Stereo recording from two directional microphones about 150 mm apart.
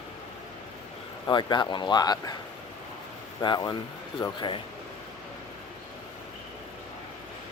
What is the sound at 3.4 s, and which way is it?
Speech, 30° left (ahead or behind).